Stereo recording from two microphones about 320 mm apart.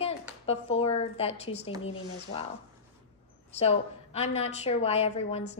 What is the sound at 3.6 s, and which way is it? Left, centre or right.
A woman's voice, centre.